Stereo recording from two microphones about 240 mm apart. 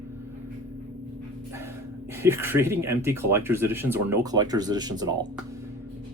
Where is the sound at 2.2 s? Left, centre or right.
Centre.